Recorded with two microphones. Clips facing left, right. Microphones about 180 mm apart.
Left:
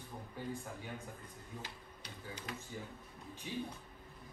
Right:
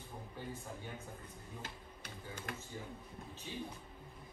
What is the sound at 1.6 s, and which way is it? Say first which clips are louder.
Speech: left 1 dB; 50° right (ahead or behind).